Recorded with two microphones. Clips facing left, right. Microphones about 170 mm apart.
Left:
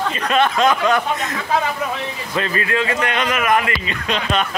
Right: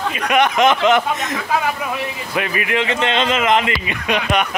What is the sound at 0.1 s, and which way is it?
Speech, 10° right (ahead or behind).